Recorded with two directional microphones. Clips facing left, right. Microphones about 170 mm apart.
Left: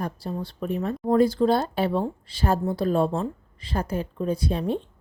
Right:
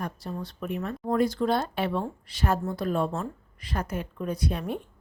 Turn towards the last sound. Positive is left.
turn(degrees=30)  # may be behind; listen again after turning